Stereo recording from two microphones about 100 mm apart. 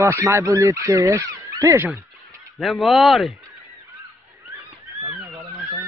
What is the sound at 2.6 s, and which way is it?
Speech, centre (ahead or behind).